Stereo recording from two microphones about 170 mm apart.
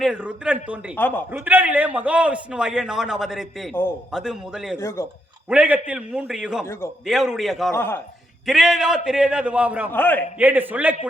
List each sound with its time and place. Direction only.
0.0 s a man's voice: 5° right (ahead or behind)
0.9 s a man's voice: 10° left (ahead or behind)
1.3 s a man's voice: 10° right (ahead or behind)
4.8 s a man's voice: 15° left (ahead or behind)
5.5 s a man's voice: 5° right (ahead or behind)
7.7 s a man's voice: 15° left (ahead or behind)
8.4 s a man's voice: centre (ahead or behind)
9.9 s a man's voice: 10° left (ahead or behind)
10.3 s a man's voice: 10° right (ahead or behind)